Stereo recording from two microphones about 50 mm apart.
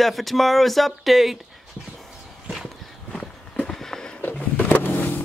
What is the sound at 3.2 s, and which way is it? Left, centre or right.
Horse, centre.